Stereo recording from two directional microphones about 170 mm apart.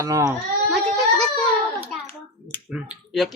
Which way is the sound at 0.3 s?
Centre (ahead or behind).